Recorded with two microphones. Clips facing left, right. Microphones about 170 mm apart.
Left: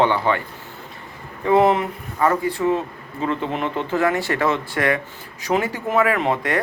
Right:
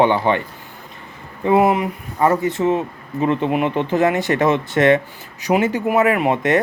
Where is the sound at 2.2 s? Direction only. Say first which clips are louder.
Right 3 dB; 20° right (ahead or behind).